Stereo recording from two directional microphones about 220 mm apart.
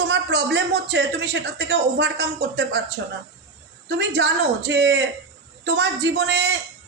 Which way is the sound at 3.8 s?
50° right (ahead or behind).